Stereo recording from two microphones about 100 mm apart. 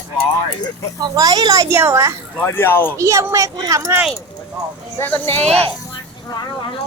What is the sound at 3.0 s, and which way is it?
Speech, 35° right (ahead or behind).